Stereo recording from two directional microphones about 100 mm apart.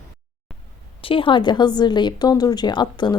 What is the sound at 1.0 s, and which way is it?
Speech, 60° left (ahead or behind).